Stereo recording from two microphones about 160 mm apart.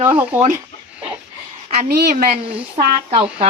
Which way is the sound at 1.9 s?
65° right (ahead or behind).